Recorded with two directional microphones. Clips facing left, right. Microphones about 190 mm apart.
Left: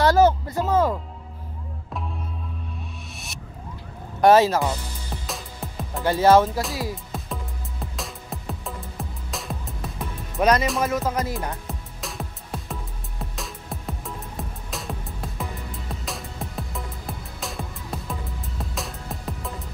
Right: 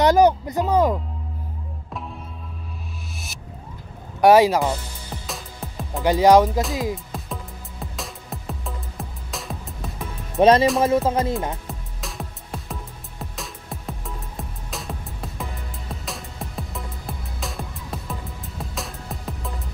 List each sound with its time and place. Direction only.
0.0 s music: 20° right (ahead or behind)
4.2 s speech: 10° right (ahead or behind)
5.2 s music: centre (ahead or behind)
6.0 s speech: 15° right (ahead or behind)
7.1 s music: centre (ahead or behind)
10.4 s music: 30° right (ahead or behind)
11.6 s music: centre (ahead or behind)